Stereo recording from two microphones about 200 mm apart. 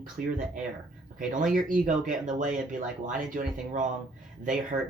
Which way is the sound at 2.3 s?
40° right (ahead or behind).